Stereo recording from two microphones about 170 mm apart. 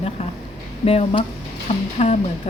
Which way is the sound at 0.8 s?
35° left (ahead or behind).